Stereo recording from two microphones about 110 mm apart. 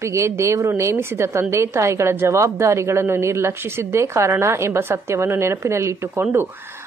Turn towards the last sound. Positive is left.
turn(degrees=-20)  # may be behind; listen again after turning